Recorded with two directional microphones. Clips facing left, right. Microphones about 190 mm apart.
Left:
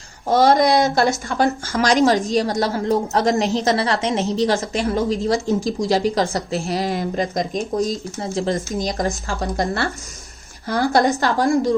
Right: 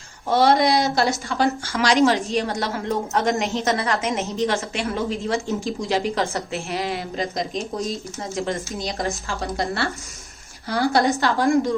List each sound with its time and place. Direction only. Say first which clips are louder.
0.3 s a woman's voice: left 3 dB; 40° left (ahead or behind)
8.2 s a woman's voice: left 4 dB; 35° left (ahead or behind)